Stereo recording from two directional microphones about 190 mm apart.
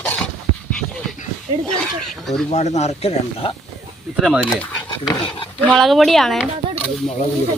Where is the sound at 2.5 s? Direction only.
35° left (ahead or behind).